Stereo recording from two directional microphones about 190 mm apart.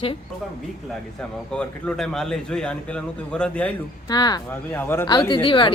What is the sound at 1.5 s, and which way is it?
A man's voice, 5° left (ahead or behind).